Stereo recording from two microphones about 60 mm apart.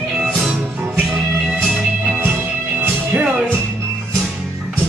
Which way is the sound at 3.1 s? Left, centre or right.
Right.